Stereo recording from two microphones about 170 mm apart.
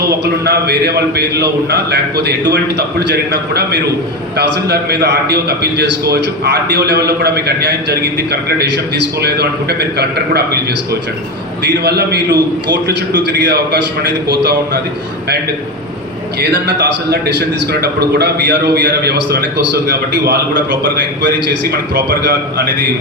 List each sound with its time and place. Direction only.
0.1 s a man's voice: 70° right (ahead or behind)
11.6 s a man's voice: 70° right (ahead or behind)
16.4 s a man's voice: 80° right